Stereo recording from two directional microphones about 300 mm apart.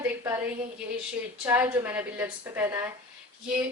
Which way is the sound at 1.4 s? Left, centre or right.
Centre.